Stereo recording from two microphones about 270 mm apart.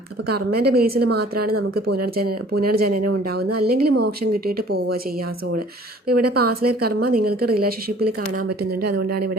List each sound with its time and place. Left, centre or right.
0.3 s speech: right
6.1 s speech: right
8.4 s speech: right
9.0 s speech: right